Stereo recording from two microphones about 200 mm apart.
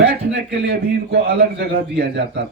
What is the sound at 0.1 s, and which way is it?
A man's voice, 50° right (ahead or behind).